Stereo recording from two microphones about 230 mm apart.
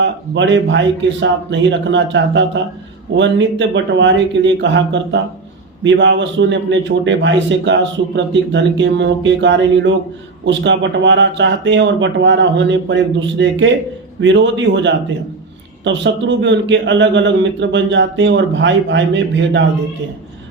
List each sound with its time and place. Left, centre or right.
0.0 s a man's voice: right